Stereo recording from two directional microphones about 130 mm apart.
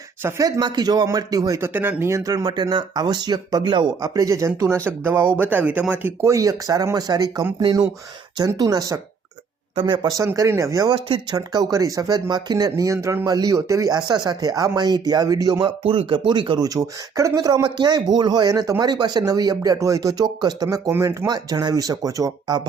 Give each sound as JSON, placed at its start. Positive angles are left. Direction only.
{"t": 0.2, "sound": "speech", "side_deg": -20}
{"t": 0.4, "sound": "speech", "side_deg": -30}
{"t": 9.7, "sound": "speech", "side_deg": -40}
{"t": 10.1, "sound": "speech", "side_deg": -25}
{"t": 15.6, "sound": "speech", "side_deg": -45}